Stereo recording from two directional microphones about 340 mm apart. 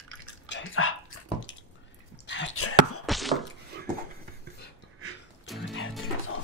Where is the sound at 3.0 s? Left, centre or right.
Centre.